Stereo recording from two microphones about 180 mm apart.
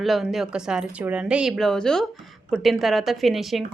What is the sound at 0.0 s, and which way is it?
A woman's voice, centre (ahead or behind).